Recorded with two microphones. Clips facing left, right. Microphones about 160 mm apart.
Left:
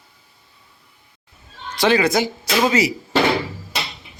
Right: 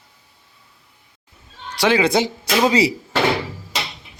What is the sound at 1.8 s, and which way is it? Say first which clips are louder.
Speech: even; 15° right (ahead or behind).